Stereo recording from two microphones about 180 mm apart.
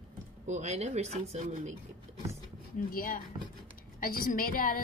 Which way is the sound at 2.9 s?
50° left (ahead or behind).